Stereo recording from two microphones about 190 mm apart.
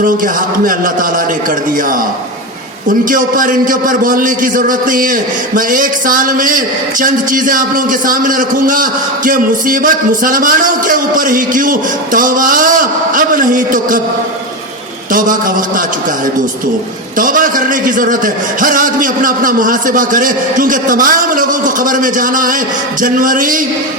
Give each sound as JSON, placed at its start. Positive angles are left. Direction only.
{"t": 3.0, "sound": "a man's voice", "side_deg": -45}
{"t": 15.1, "sound": "a man's voice", "side_deg": -45}
{"t": 17.2, "sound": "a man's voice", "side_deg": -45}